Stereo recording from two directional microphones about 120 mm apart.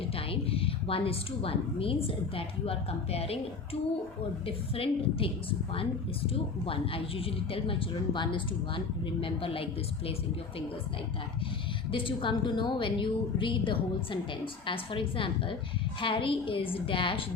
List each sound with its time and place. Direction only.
0.0 s a woman's voice: 50° left (ahead or behind)
4.4 s a woman's voice: 50° left (ahead or behind)
11.9 s a woman's voice: 45° left (ahead or behind)